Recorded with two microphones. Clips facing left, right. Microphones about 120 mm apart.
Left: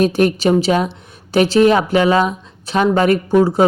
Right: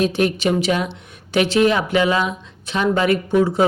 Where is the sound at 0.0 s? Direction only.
45° left (ahead or behind).